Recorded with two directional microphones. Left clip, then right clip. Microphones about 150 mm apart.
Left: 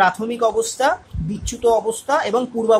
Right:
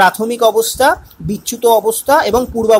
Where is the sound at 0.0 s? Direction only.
30° right (ahead or behind).